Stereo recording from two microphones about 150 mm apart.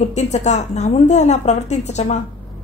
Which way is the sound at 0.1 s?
50° left (ahead or behind).